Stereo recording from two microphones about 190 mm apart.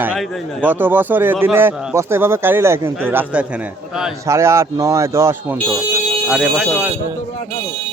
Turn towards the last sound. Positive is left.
turn(degrees=-5)  # may be behind; listen again after turning